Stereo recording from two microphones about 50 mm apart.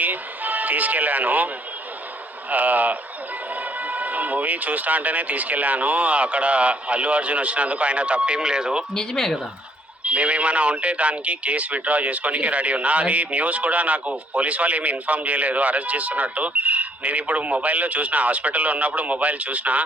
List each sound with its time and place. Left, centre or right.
0.0 s speech: right
2.5 s speech: right; by 8.8 s centre
8.9 s speech: centre
10.0 s speech: right